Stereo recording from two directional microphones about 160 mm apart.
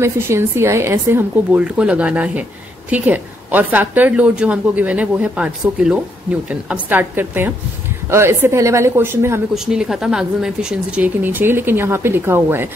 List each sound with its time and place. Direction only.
0.0 s speech: 15° right (ahead or behind)
9.5 s speech: 5° right (ahead or behind)